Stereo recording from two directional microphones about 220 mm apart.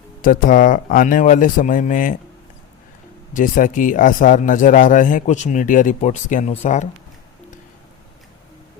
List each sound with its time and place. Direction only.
0.2 s a man's voice: 40° left (ahead or behind)
3.3 s a man's voice: 35° left (ahead or behind)